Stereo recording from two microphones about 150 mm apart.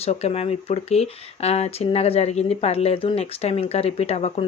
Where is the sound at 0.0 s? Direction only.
45° left (ahead or behind).